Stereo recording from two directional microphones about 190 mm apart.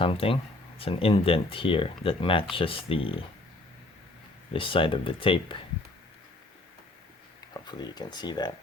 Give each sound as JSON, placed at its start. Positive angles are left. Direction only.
{"t": 0.0, "sound": "speech", "side_deg": 30}
{"t": 4.5, "sound": "speech", "side_deg": 25}
{"t": 7.5, "sound": "speech", "side_deg": 20}